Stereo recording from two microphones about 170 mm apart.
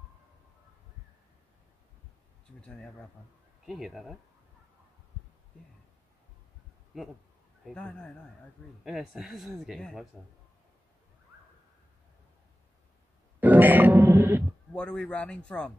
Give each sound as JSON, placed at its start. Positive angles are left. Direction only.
{"t": 3.6, "sound": "speech", "side_deg": 0}
{"t": 7.6, "sound": "speech", "side_deg": 5}
{"t": 13.4, "sound": "music", "side_deg": -10}
{"t": 14.7, "sound": "a man's voice", "side_deg": 5}